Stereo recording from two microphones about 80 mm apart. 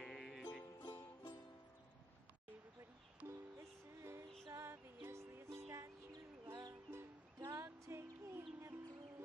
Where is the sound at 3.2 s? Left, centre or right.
Right.